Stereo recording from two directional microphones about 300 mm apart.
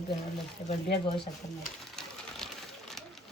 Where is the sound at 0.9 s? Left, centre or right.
Centre.